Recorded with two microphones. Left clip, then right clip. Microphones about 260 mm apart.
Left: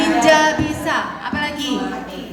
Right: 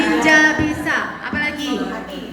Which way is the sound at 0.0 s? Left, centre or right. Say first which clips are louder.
Even; left.